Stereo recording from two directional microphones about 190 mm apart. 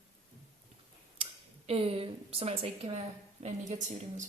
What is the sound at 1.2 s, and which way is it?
A woman's voice, 30° right (ahead or behind).